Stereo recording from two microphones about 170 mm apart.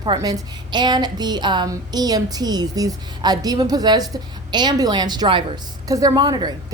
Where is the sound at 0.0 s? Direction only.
25° right (ahead or behind).